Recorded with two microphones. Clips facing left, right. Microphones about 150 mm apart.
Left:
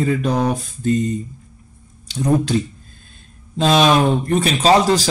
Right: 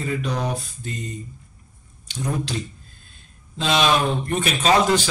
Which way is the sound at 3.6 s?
40° left (ahead or behind).